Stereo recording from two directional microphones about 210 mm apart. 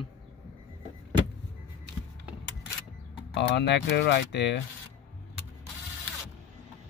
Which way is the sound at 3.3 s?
55° left (ahead or behind).